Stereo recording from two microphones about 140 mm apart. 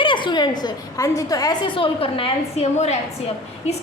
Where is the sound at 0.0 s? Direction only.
35° left (ahead or behind).